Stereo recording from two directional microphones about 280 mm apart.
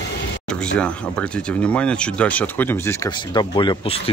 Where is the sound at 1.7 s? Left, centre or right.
Centre.